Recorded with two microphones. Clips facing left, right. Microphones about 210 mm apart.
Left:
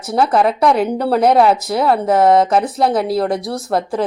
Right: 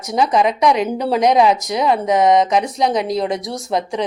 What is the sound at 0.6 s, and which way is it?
Speech, 10° right (ahead or behind).